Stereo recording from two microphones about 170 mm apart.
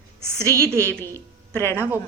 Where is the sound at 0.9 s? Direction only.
10° left (ahead or behind).